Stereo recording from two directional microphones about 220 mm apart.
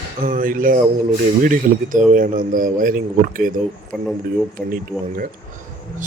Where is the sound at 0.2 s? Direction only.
40° right (ahead or behind).